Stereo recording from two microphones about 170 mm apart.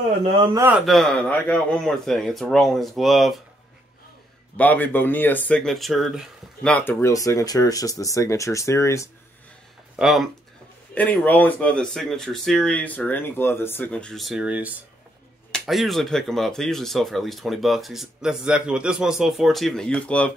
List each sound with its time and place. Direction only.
0.5 s a man's voice: 15° right (ahead or behind)
0.7 s speech: centre (ahead or behind)
4.6 s speech: 10° left (ahead or behind)
9.9 s speech: centre (ahead or behind)
11.0 s speech: 10° left (ahead or behind)